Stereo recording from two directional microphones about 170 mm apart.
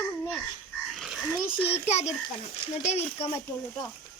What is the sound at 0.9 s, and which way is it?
Frog, centre (ahead or behind).